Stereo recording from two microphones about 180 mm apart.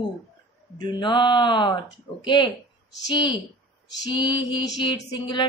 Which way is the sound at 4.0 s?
25° left (ahead or behind).